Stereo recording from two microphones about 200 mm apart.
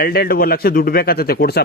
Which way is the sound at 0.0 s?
50° left (ahead or behind).